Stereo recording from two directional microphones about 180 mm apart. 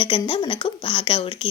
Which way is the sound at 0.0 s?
30° left (ahead or behind).